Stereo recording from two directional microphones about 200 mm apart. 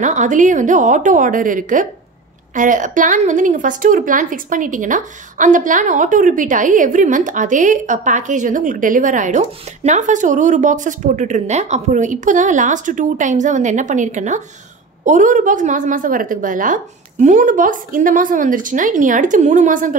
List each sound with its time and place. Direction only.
0.0 s a woman's voice: 40° right (ahead or behind)